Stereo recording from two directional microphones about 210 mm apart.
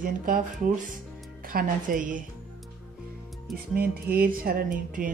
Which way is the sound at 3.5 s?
45° right (ahead or behind).